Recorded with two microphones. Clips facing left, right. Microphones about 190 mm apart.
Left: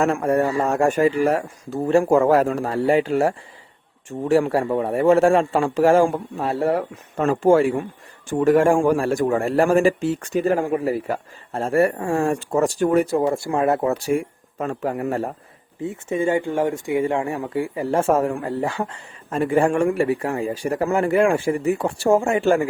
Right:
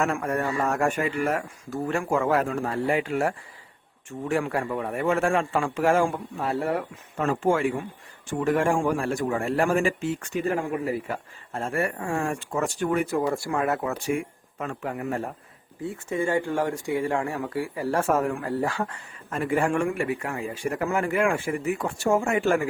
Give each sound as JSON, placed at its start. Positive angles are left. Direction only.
{"t": 0.0, "sound": "a man's voice", "side_deg": 30}
{"t": 15.8, "sound": "speech", "side_deg": 20}